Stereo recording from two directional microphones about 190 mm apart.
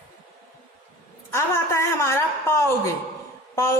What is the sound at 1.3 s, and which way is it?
A woman's voice, 15° left (ahead or behind).